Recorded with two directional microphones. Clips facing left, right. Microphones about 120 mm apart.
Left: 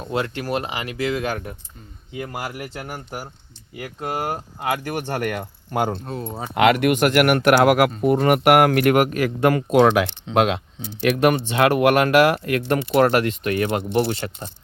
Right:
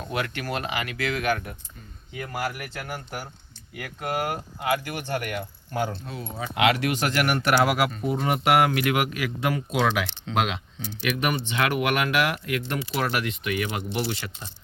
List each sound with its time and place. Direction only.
0.1 s speech: 30° left (ahead or behind)
5.7 s speech: 55° left (ahead or behind)
10.8 s speech: 25° left (ahead or behind)
11.2 s speech: 60° left (ahead or behind)
11.7 s speech: 40° left (ahead or behind)